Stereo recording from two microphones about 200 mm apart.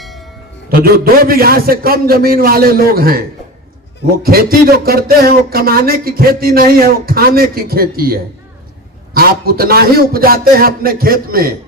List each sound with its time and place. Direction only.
0.0 s music: centre (ahead or behind)
0.7 s a man's voice: 50° right (ahead or behind)